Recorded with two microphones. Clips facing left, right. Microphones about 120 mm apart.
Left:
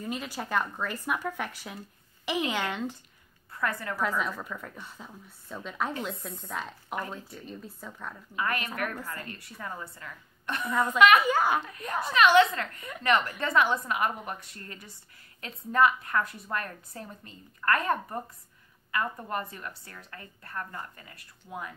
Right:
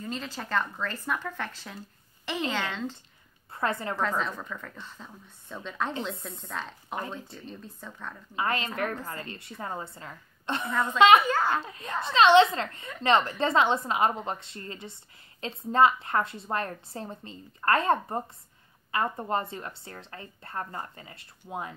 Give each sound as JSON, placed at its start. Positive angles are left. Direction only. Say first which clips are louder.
{"t": 0.0, "sound": "speech", "louder": "left 1 dB", "side_deg": 10}
{"t": 3.5, "sound": "a woman's voice", "louder": "right 2 dB", "side_deg": -25}
{"t": 4.2, "sound": "speech", "louder": "even", "side_deg": 5}
{"t": 7.0, "sound": "a woman's voice", "louder": "right 1 dB", "side_deg": -25}
{"t": 7.3, "sound": "speech", "louder": "left 1 dB", "side_deg": 5}
{"t": 8.4, "sound": "a woman's voice", "louder": "right 2 dB", "side_deg": -25}
{"t": 11.2, "sound": "speech", "louder": "left 1 dB", "side_deg": 10}
{"t": 11.6, "sound": "a woman's voice", "louder": "left 1 dB", "side_deg": -25}